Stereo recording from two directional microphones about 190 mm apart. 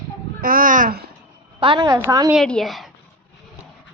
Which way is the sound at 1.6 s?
25° right (ahead or behind).